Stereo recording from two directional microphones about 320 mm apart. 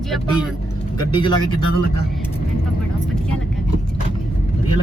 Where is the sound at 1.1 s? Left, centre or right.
Centre.